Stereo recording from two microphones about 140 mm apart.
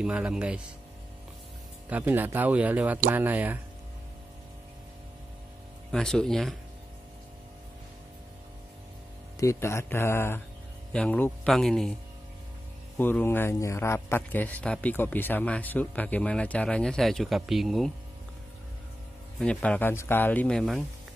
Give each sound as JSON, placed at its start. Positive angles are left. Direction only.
{"t": 0.0, "sound": "speech", "side_deg": -5}
{"t": 1.9, "sound": "speech", "side_deg": -15}
{"t": 5.9, "sound": "speech", "side_deg": 5}
{"t": 9.4, "sound": "a man's voice", "side_deg": 20}
{"t": 12.9, "sound": "a man's voice", "side_deg": 15}
{"t": 19.3, "sound": "a man's voice", "side_deg": 5}